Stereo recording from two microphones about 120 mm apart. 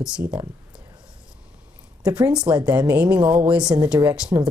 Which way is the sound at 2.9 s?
15° right (ahead or behind).